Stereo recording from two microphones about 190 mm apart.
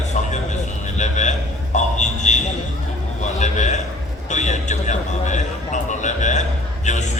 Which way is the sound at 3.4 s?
40° left (ahead or behind).